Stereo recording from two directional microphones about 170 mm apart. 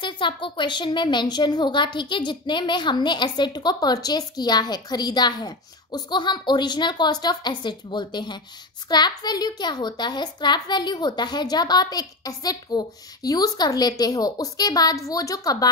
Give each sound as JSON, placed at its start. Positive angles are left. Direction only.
{"t": 0.0, "sound": "speech", "side_deg": 30}